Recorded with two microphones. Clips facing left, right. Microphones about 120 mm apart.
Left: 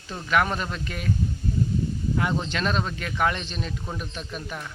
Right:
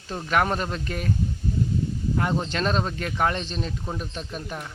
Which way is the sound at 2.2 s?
40° right (ahead or behind).